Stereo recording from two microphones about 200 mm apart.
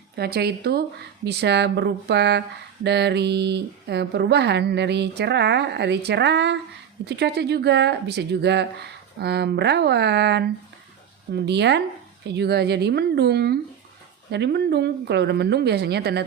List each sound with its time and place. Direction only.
0.2 s speech: 50° right (ahead or behind)
11.4 s speech: 60° right (ahead or behind)